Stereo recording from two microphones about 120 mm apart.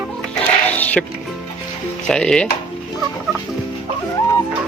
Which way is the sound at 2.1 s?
5° left (ahead or behind).